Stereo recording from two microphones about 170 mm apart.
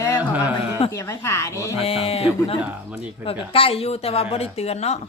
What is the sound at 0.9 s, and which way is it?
Speech, 15° left (ahead or behind).